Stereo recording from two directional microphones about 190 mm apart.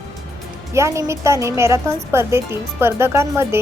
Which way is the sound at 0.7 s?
15° right (ahead or behind).